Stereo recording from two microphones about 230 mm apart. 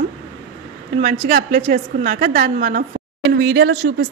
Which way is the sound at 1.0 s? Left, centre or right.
Right.